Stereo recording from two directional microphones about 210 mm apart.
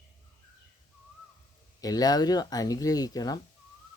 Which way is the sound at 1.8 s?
20° left (ahead or behind).